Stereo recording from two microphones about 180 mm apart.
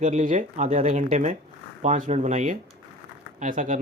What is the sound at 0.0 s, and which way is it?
Speech, 40° right (ahead or behind).